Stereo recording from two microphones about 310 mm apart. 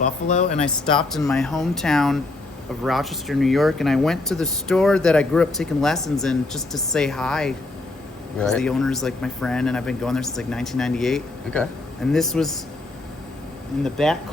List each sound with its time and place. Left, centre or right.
0.3 s speech: left
0.6 s speech: centre
13.8 s speech: centre